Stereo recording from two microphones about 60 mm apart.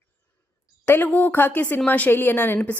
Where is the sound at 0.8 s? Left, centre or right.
Left.